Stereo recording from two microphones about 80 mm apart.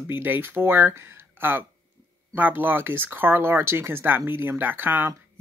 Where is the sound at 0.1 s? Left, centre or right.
Right.